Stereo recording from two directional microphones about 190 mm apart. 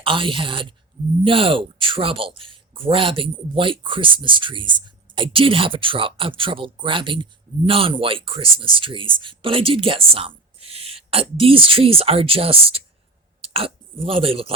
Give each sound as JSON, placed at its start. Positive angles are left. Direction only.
{"t": 0.0, "sound": "speech", "side_deg": -25}